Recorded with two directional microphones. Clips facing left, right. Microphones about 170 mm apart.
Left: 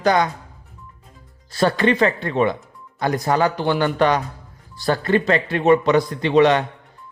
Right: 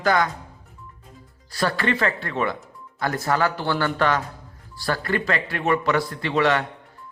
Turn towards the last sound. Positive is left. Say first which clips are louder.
# left 6 dB
turn(degrees=20)  # may be behind; listen again after turning